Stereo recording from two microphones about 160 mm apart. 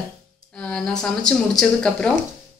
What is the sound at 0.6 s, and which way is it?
Speech, 5° left (ahead or behind).